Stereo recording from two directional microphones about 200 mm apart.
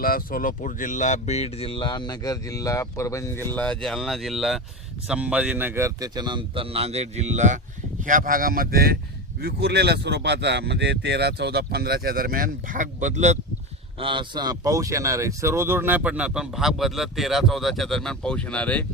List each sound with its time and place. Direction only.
0.0 s speech: 45° left (ahead or behind); by 13.4 s 35° right (ahead or behind)
14.0 s speech: 25° right (ahead or behind); by 18.9 s 5° left (ahead or behind)